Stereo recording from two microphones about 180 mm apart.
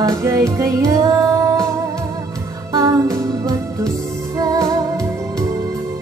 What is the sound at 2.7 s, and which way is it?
Music, 20° right (ahead or behind).